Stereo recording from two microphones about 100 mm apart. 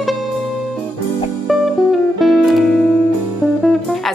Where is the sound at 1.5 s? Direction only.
Centre (ahead or behind).